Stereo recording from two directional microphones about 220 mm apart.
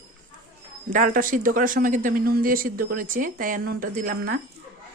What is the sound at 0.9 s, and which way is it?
Speech, 35° right (ahead or behind).